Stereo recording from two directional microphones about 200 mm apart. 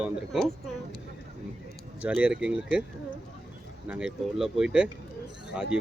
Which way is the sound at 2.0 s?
5° right (ahead or behind).